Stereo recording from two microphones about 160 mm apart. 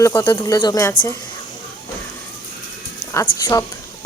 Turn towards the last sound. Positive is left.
turn(degrees=20)  # may be behind; listen again after turning